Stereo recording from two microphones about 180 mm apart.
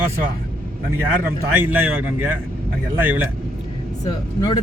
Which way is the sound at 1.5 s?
10° right (ahead or behind).